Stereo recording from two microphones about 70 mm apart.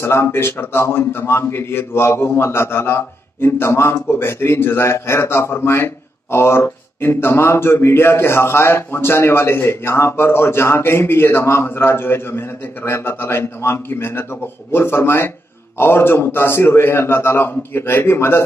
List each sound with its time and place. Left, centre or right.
0.0 s a man's voice: left